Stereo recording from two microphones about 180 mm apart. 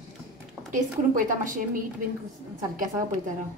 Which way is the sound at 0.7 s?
45° right (ahead or behind).